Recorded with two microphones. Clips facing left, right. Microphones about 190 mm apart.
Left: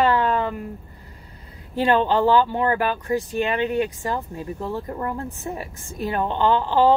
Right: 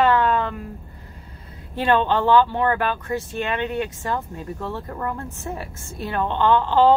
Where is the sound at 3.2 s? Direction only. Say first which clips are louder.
Left 3 dB; 15° left (ahead or behind).